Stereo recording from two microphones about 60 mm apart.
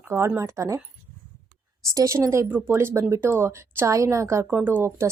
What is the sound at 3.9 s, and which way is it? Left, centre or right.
Speech, right.